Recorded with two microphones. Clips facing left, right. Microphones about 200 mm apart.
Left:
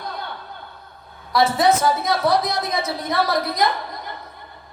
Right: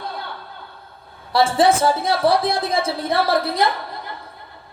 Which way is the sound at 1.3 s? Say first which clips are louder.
Right 1 dB; 30° right (ahead or behind).